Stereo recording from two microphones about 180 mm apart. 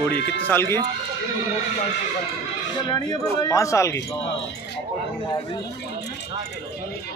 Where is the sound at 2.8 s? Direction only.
20° left (ahead or behind).